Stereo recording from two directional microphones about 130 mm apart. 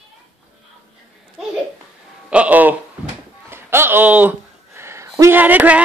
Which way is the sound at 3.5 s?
20° right (ahead or behind).